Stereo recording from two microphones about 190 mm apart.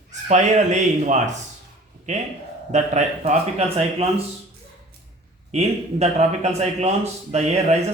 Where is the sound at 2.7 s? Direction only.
40° right (ahead or behind).